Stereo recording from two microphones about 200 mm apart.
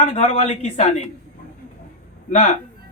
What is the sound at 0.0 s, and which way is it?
Speech, 35° left (ahead or behind).